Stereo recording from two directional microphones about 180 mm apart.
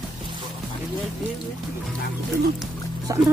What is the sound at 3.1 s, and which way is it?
Music, 20° right (ahead or behind).